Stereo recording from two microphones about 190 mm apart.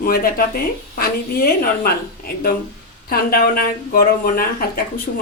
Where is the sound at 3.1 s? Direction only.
50° left (ahead or behind).